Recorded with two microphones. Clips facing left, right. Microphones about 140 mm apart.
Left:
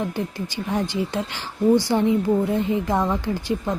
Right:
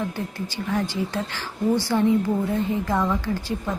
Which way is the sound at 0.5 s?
20° left (ahead or behind).